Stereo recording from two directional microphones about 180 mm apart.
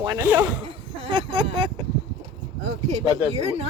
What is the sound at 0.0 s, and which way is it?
Speech, 15° right (ahead or behind).